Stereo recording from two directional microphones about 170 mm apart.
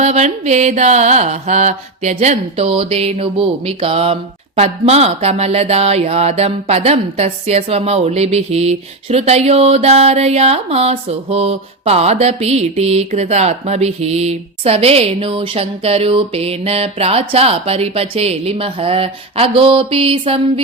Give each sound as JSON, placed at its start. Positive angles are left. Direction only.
{"t": 0.0, "sound": "mantra", "side_deg": -40}